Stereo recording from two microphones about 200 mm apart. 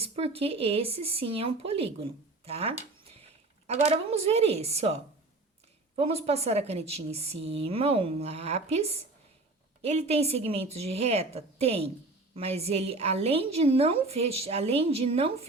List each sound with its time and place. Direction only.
0.0 s a woman's voice: 30° right (ahead or behind)
6.0 s a woman's voice: 30° right (ahead or behind)